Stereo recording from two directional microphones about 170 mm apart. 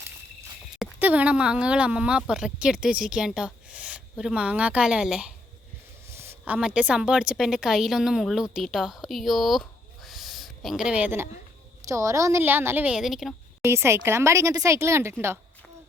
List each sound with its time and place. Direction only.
0.8 s speech: 10° right (ahead or behind)
6.1 s speech: 15° right (ahead or behind)
10.1 s a sound: centre (ahead or behind)
11.9 s speech: 20° right (ahead or behind); by 13.3 s centre (ahead or behind)
13.6 s speech: 15° right (ahead or behind)